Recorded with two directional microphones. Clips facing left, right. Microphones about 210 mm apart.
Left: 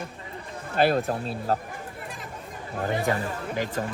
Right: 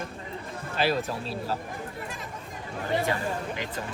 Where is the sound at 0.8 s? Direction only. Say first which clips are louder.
Left 5 dB; 50° left (ahead or behind).